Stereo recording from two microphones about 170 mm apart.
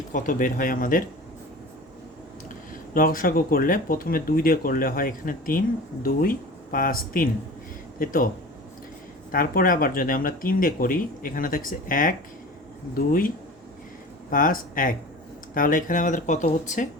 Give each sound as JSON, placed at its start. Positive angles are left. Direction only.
{"t": 0.1, "sound": "speech", "side_deg": 55}
{"t": 2.9, "sound": "speech", "side_deg": 55}
{"t": 9.3, "sound": "speech", "side_deg": 55}